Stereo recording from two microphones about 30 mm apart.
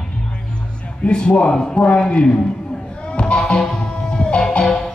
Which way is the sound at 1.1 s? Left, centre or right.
Left.